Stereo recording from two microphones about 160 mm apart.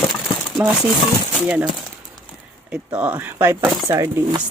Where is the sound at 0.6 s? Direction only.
10° right (ahead or behind).